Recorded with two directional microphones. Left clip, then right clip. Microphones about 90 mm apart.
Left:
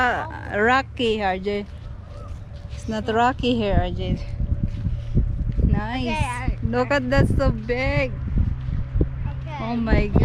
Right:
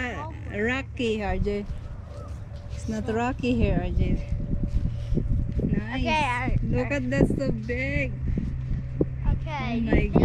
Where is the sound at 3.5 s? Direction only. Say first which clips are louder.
Left 5 dB; 35° right (ahead or behind).